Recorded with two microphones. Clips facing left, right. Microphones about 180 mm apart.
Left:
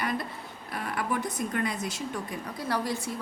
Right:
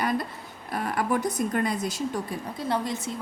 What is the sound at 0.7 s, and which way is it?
Speech, 40° right (ahead or behind).